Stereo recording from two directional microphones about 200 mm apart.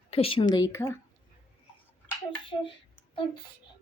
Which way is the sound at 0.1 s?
30° left (ahead or behind).